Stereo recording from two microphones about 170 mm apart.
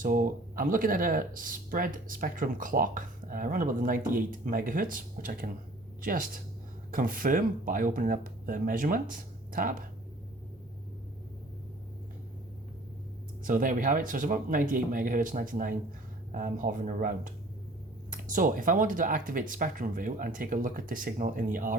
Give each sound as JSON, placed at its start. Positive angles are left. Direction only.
{"t": 0.0, "sound": "speech", "side_deg": -55}
{"t": 13.4, "sound": "speech", "side_deg": -50}